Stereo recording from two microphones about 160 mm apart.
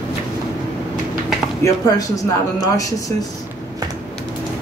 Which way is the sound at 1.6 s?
20° left (ahead or behind).